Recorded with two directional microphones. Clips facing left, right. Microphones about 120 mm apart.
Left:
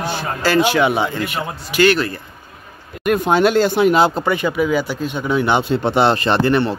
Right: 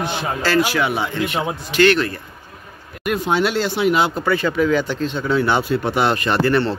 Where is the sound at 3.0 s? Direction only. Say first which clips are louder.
Left 4 dB; 50° left (ahead or behind).